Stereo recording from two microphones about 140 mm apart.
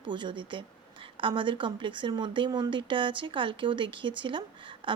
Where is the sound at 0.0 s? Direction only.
35° right (ahead or behind).